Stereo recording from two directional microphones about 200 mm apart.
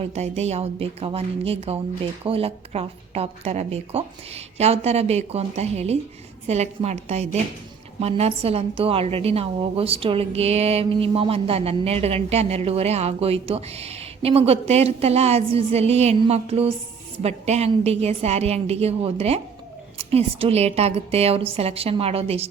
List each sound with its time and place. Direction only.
0.0 s a woman's voice: 35° right (ahead or behind)